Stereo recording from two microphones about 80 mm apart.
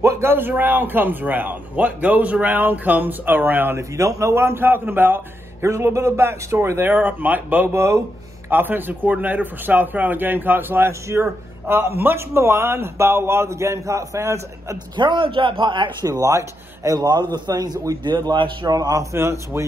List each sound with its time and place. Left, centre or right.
0.0 s a man's voice: right
3.9 s a man's voice: right
6.9 s a man's voice: right
8.5 s a man's voice: right
15.0 s a man's voice: right
16.1 s a man's voice: right
18.7 s a man's voice: right
19.1 s a man's voice: right